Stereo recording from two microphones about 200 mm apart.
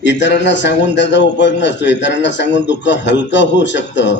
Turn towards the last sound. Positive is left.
turn(degrees=65)  # may be behind; listen again after turning